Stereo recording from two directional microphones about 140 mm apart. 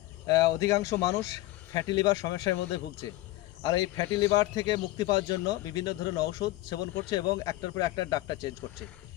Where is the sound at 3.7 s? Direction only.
30° left (ahead or behind).